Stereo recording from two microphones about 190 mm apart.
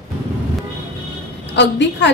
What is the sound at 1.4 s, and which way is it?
Speech, 65° left (ahead or behind).